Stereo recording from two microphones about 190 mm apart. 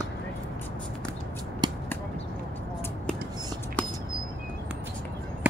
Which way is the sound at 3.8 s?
5° left (ahead or behind).